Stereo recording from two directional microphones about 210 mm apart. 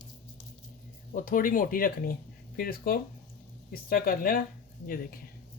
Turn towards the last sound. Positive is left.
turn(degrees=45)  # may be behind; listen again after turning